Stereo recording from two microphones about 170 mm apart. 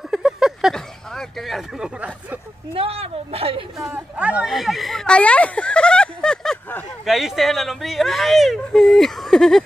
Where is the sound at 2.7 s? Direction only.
35° right (ahead or behind).